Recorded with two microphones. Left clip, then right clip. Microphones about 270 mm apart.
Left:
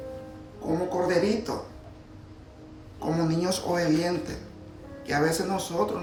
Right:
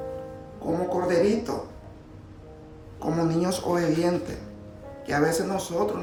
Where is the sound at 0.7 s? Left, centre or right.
Centre.